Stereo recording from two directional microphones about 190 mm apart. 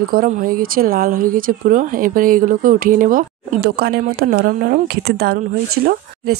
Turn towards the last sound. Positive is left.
turn(degrees=-55)  # may be behind; listen again after turning